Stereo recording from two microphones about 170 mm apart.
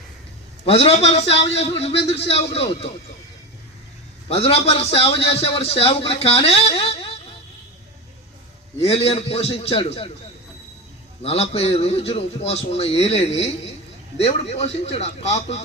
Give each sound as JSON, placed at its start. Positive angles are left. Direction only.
{"t": 0.6, "sound": "a man's voice", "side_deg": 35}
{"t": 4.3, "sound": "a man's voice", "side_deg": 35}
{"t": 8.8, "sound": "a man's voice", "side_deg": 35}
{"t": 11.2, "sound": "a man's voice", "side_deg": 35}